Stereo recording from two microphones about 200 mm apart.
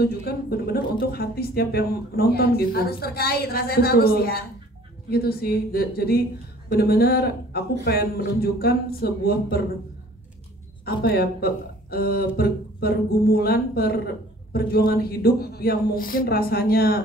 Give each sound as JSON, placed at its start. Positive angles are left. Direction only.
{"t": 0.0, "sound": "speech", "side_deg": 50}
{"t": 10.9, "sound": "speech", "side_deg": 50}